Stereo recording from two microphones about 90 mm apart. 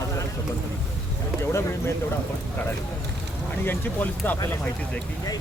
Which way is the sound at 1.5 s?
30° left (ahead or behind).